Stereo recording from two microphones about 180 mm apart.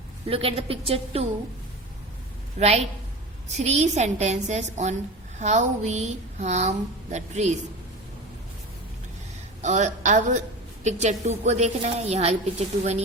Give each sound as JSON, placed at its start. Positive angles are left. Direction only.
{"t": 0.3, "sound": "a woman's voice", "side_deg": -30}
{"t": 2.6, "sound": "a woman's voice", "side_deg": -35}
{"t": 9.6, "sound": "a woman's voice", "side_deg": -40}